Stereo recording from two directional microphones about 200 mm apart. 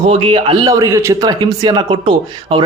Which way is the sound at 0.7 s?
15° right (ahead or behind).